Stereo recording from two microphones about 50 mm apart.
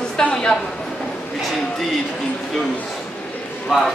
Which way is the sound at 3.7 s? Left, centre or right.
Centre.